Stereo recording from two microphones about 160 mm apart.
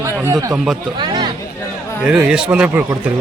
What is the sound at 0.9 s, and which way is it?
Speech, 25° right (ahead or behind).